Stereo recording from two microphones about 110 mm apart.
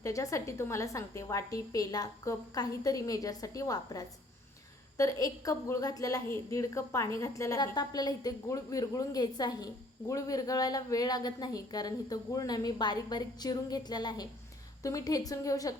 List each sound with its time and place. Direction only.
0.0 s a woman's voice: 30° left (ahead or behind)